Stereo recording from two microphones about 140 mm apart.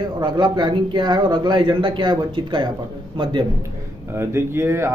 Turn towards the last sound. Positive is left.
turn(degrees=-20)  # may be behind; listen again after turning